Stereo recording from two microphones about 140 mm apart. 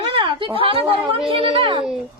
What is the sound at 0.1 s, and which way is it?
A woman's voice, 35° right (ahead or behind).